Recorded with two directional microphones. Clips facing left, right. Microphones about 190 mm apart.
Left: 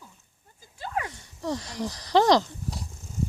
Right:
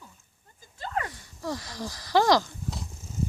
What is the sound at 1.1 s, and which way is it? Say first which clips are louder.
Speech: left 3 dB; 20° left (ahead or behind).